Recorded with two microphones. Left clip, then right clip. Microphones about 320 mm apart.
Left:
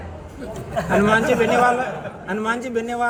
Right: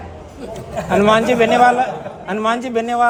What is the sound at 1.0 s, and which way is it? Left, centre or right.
A man's voice, right.